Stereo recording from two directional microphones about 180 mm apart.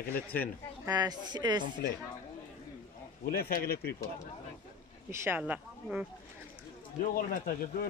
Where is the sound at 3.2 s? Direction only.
60° left (ahead or behind).